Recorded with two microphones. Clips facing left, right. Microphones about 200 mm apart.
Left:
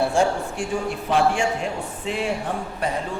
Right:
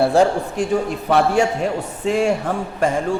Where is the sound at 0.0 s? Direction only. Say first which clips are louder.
Right 5 dB; 35° right (ahead or behind).